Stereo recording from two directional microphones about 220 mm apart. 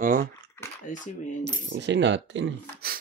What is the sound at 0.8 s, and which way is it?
Speech, 35° left (ahead or behind).